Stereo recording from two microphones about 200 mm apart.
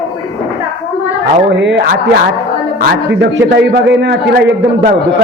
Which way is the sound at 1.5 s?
60° right (ahead or behind).